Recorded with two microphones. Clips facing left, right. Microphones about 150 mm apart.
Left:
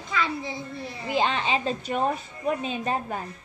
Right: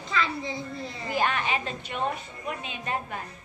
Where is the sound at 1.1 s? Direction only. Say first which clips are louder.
Left 2 dB; 25° left (ahead or behind).